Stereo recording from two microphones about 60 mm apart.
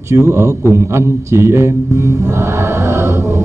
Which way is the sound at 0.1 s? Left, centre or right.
Right.